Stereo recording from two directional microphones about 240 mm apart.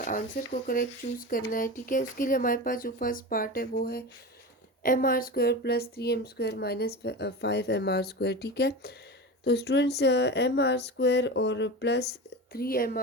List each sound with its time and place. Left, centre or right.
0.0 s speech: left